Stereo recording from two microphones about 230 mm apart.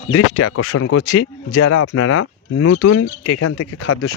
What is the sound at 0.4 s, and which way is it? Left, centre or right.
Speech, left.